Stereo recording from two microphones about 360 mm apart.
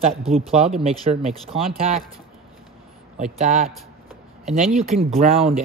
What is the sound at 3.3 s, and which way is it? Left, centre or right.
Speech, centre.